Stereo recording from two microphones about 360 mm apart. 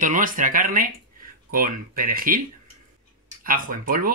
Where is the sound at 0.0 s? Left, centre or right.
Right.